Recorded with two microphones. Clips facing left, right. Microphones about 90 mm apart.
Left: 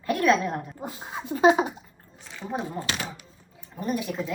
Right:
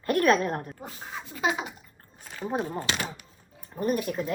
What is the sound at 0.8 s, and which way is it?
Speech, 15° left (ahead or behind).